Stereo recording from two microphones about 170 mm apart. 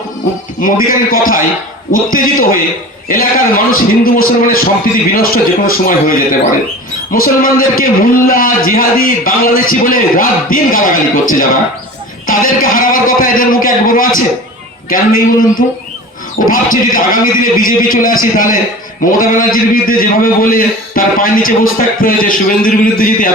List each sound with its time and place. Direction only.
0.6 s a man's voice: 55° left (ahead or behind)